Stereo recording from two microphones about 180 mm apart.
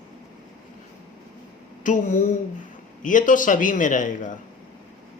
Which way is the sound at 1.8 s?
45° left (ahead or behind).